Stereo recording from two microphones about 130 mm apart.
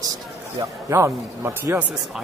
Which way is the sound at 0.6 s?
20° right (ahead or behind).